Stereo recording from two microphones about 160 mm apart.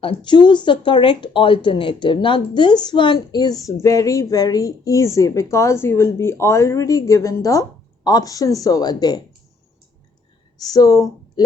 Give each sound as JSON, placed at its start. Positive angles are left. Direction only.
{"t": 0.0, "sound": "speech", "side_deg": 30}
{"t": 10.7, "sound": "speech", "side_deg": 20}